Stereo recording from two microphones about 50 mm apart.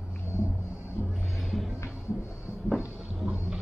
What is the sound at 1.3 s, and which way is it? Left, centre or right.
Music, centre.